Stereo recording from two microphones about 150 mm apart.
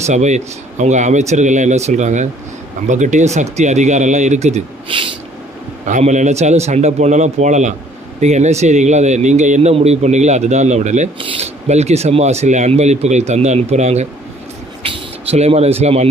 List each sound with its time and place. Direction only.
0.0 s speech: 50° right (ahead or behind)
4.9 s a sound: 35° right (ahead or behind)
5.8 s speech: 55° right (ahead or behind)